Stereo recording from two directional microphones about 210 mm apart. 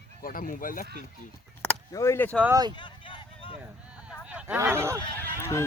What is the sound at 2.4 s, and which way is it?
Speech, 15° right (ahead or behind).